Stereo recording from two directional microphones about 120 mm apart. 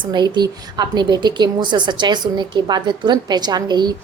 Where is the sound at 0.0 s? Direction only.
40° right (ahead or behind).